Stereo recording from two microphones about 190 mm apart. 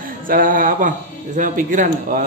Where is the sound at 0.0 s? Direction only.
45° right (ahead or behind).